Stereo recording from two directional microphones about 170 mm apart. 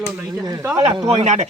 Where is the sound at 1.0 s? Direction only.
40° right (ahead or behind).